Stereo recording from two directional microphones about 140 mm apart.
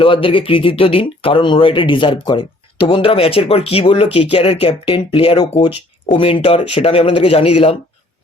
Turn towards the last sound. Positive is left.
turn(degrees=40)  # may be behind; listen again after turning